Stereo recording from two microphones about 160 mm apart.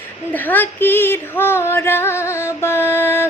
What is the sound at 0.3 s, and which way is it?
Female singing, 10° left (ahead or behind).